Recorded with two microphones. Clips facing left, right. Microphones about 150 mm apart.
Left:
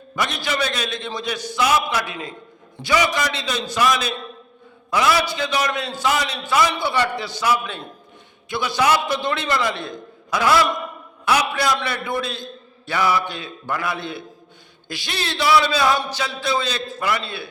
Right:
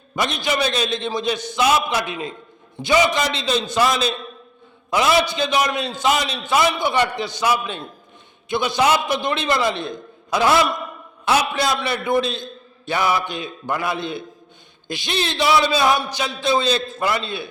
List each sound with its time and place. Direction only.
0.2 s a man's voice: 20° right (ahead or behind)